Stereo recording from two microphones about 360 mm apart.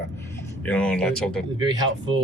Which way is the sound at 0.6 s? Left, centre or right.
Centre.